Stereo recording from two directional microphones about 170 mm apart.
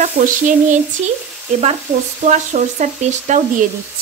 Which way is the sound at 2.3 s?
45° right (ahead or behind).